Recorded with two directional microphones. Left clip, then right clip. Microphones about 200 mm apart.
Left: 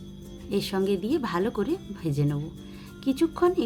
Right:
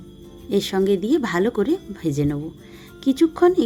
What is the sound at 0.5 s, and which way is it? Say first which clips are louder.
A woman's voice: right 7 dB; 25° right (ahead or behind).